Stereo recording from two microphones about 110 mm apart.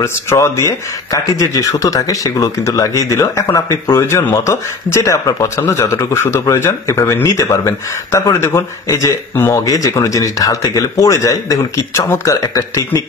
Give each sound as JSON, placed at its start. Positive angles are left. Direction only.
{"t": 0.0, "sound": "a man's voice", "side_deg": 25}